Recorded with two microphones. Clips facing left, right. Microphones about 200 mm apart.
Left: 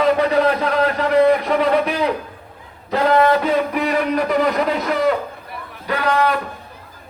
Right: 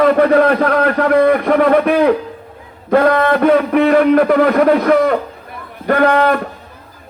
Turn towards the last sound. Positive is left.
turn(degrees=-55)  # may be behind; listen again after turning